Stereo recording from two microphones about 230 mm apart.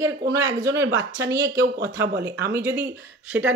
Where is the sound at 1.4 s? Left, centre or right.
Right.